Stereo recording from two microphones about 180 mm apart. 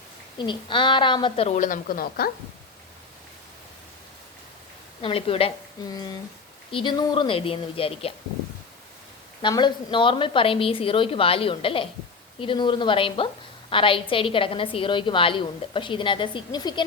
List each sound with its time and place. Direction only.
0.3 s a woman's voice: 25° left (ahead or behind); by 2.3 s 55° left (ahead or behind)
5.0 s a woman's voice: 30° left (ahead or behind)
9.4 s a woman's voice: 25° left (ahead or behind)